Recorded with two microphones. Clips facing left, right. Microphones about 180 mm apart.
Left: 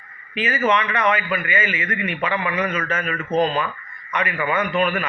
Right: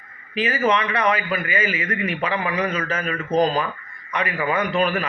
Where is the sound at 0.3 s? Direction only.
35° right (ahead or behind).